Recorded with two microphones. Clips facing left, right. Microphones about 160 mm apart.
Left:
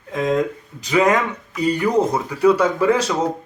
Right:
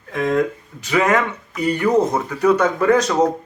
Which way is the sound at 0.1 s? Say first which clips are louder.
Right 1 dB; 20° left (ahead or behind).